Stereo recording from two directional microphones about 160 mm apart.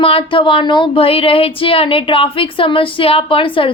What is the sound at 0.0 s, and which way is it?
A woman's voice, 35° left (ahead or behind).